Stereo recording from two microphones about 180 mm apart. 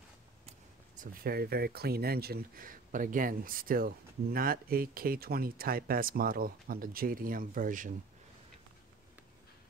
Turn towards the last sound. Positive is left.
turn(degrees=-50)  # may be behind; listen again after turning